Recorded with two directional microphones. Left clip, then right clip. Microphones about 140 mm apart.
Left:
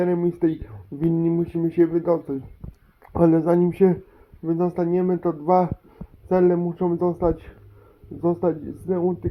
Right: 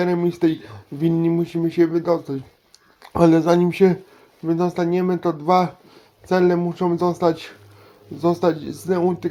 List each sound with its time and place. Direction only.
0.0 s speech: 30° right (ahead or behind)
1.5 s speech: 5° right (ahead or behind)
3.0 s speech: 30° right (ahead or behind)